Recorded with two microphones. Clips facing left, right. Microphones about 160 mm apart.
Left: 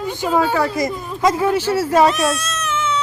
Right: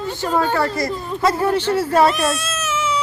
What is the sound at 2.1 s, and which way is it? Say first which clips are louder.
Cat: left 1 dB; centre (ahead or behind).